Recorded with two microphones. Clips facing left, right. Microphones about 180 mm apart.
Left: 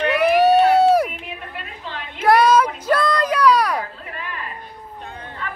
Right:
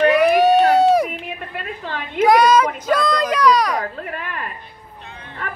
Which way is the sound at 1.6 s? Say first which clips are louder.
Right 5 dB; 50° right (ahead or behind).